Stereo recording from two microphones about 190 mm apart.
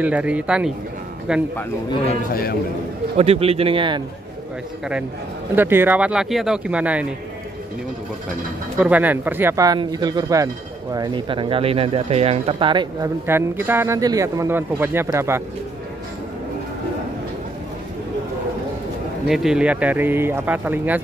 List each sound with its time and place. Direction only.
0.0 s a man's voice: 5° right (ahead or behind)
3.2 s a man's voice: 30° right (ahead or behind)
5.6 s speech: 10° right (ahead or behind)
8.7 s speech: 10° right (ahead or behind); by 13.1 s 25° right (ahead or behind)
13.3 s speech: 10° right (ahead or behind)
19.2 s speech: centre (ahead or behind)